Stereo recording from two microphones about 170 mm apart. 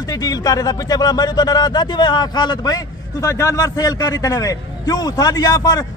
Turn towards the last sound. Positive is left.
turn(degrees=20)  # may be behind; listen again after turning